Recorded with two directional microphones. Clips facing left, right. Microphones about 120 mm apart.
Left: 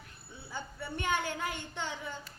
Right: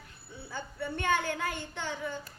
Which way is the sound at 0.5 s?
15° left (ahead or behind).